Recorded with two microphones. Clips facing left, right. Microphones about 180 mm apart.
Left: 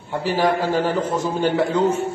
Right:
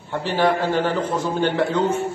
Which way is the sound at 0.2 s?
10° left (ahead or behind).